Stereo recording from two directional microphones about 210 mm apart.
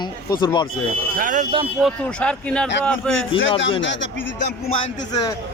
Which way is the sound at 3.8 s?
60° left (ahead or behind).